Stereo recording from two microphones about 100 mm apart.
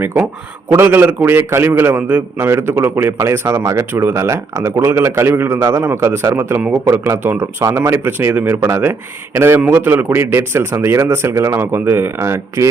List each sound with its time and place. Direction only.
0.7 s a man's voice: 25° right (ahead or behind)